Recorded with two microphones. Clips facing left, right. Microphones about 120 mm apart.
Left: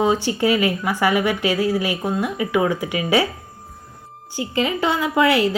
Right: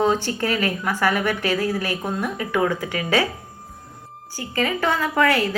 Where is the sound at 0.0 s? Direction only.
15° left (ahead or behind).